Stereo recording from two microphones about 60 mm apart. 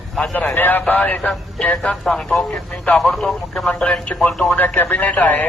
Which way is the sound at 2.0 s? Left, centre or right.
Centre.